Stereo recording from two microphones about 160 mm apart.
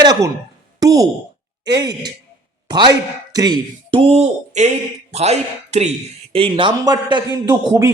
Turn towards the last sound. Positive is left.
turn(degrees=-20)  # may be behind; listen again after turning